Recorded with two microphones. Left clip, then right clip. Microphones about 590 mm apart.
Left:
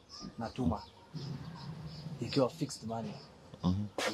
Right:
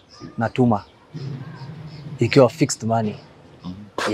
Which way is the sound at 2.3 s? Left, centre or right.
Right.